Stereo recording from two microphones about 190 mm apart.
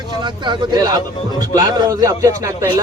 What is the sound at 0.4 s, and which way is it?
A man's voice, 20° right (ahead or behind).